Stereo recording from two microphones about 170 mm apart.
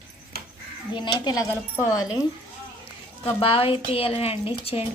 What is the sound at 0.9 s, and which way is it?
Speech, 25° left (ahead or behind).